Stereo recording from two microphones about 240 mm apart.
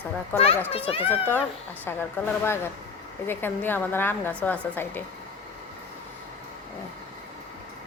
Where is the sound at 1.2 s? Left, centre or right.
Centre.